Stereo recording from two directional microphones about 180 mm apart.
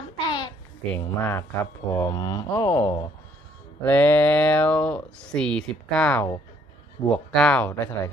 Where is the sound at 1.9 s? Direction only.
15° left (ahead or behind).